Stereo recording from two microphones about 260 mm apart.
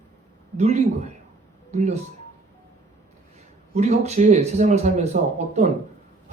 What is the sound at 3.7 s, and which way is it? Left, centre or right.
Speech, right.